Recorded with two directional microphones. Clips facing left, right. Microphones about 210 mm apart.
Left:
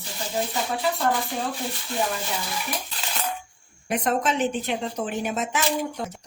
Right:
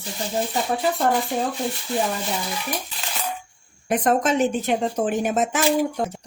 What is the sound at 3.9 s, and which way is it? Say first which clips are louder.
Speech: right 4 dB; 45° right (ahead or behind).